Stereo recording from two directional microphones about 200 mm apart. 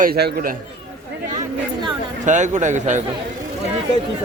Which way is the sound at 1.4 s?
20° right (ahead or behind).